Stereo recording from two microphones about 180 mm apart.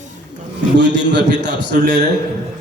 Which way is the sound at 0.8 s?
75° right (ahead or behind).